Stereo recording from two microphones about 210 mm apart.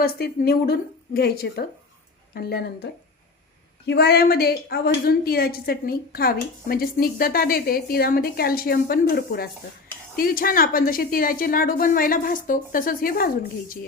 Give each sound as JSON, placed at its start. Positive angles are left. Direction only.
{"t": 0.0, "sound": "a woman's voice", "side_deg": 45}